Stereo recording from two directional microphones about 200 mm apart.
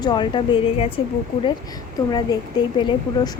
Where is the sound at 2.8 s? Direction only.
25° left (ahead or behind).